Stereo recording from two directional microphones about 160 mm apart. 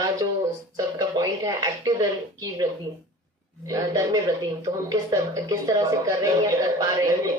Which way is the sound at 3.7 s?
20° right (ahead or behind).